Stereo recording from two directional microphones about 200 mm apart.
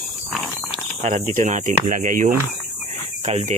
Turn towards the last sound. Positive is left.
turn(degrees=-35)  # may be behind; listen again after turning